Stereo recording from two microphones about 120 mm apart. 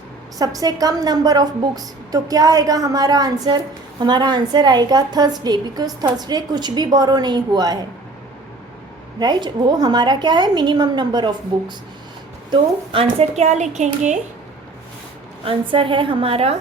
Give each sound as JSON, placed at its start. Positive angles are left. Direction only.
{"t": 0.3, "sound": "a woman's voice", "side_deg": -30}
{"t": 9.1, "sound": "a woman's voice", "side_deg": -35}
{"t": 12.5, "sound": "a woman's voice", "side_deg": -50}
{"t": 15.4, "sound": "a woman's voice", "side_deg": -45}